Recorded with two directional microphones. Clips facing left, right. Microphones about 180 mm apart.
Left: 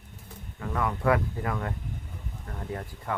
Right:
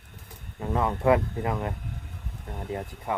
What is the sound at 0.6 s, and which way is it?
Speech, 25° right (ahead or behind).